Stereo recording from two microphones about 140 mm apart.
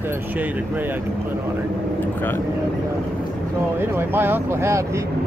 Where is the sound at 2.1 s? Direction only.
15° left (ahead or behind).